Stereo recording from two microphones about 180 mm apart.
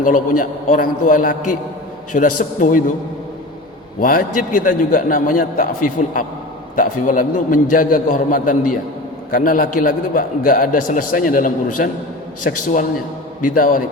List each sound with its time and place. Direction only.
0.0 s a man's voice: 50° left (ahead or behind)
4.0 s a man's voice: 50° left (ahead or behind)
13.4 s a man's voice: 50° left (ahead or behind)